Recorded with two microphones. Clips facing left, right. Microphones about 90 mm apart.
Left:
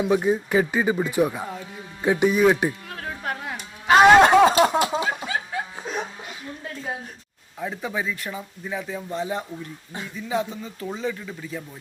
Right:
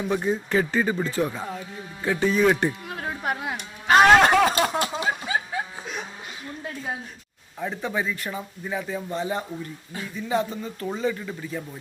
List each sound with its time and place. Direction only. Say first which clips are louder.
0.0 s speech: left 4 dB; 10° left (ahead or behind)
2.9 s a sound: right 2 dB; 15° right (ahead or behind)
3.8 s speech: left 2 dB; 5° left (ahead or behind)
4.2 s speech: left 4 dB; 15° left (ahead or behind)
5.0 s a sound: right 1 dB; 5° right (ahead or behind)
5.8 s music: left 5 dB; 35° left (ahead or behind)
7.6 s speech: right 1 dB; centre (ahead or behind)